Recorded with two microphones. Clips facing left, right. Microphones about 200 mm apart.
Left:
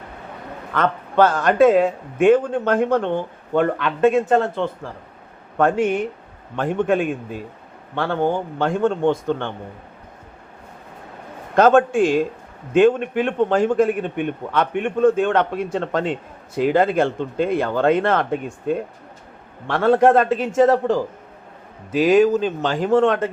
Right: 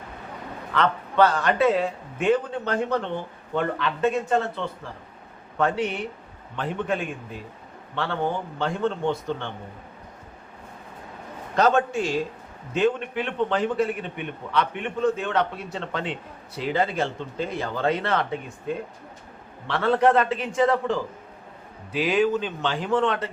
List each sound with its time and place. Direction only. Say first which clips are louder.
0.7 s speech: left 3 dB; 45° left (ahead or behind)
7.9 s speech: left 6 dB; 45° left (ahead or behind)
11.5 s speech: left 7 dB; 55° left (ahead or behind)